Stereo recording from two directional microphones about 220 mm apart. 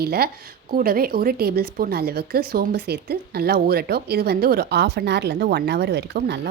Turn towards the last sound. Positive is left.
turn(degrees=-45)  # may be behind; listen again after turning